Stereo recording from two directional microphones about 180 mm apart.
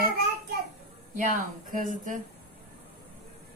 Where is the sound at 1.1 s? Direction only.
45° right (ahead or behind).